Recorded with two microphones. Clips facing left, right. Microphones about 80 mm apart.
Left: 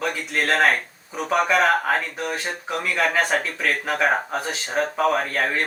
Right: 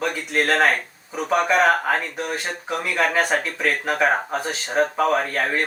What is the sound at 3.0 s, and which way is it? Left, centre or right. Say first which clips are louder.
Speech: right 1 dB; centre.